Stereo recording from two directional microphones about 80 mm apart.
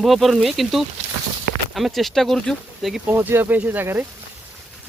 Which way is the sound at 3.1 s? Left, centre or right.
Right.